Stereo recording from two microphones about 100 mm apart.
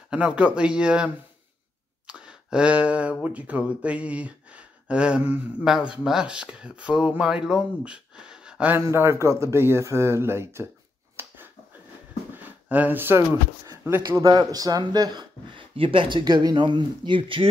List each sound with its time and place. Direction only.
0.1 s speech: 15° right (ahead or behind)
2.0 s a sound: 10° right (ahead or behind)
3.3 s speech: 15° right (ahead or behind)
8.7 s speech: 25° right (ahead or behind)
11.2 s finger snapping: 25° right (ahead or behind)
12.4 s speech: 15° right (ahead or behind)
14.5 s speech: 40° right (ahead or behind)
15.7 s speech: 60° right (ahead or behind)